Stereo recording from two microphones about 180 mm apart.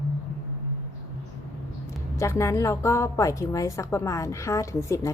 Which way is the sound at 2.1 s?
15° left (ahead or behind).